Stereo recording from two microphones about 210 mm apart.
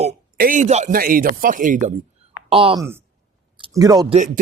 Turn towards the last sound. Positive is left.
turn(degrees=-20)  # may be behind; listen again after turning